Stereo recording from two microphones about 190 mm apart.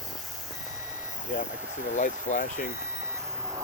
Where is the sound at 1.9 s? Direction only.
40° left (ahead or behind).